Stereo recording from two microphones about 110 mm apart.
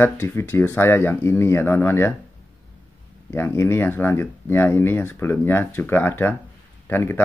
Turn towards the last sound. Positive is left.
turn(degrees=20)  # may be behind; listen again after turning